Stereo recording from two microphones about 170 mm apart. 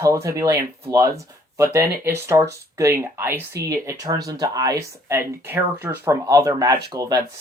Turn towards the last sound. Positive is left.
turn(degrees=-25)  # may be behind; listen again after turning